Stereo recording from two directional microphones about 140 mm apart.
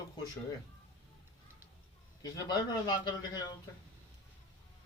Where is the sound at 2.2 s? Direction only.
25° left (ahead or behind).